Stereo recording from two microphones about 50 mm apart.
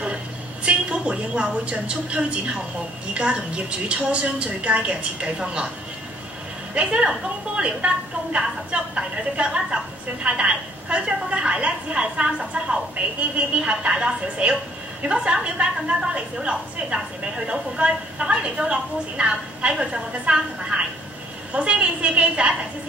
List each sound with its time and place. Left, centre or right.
0.7 s a woman's voice: right
6.7 s a woman's voice: right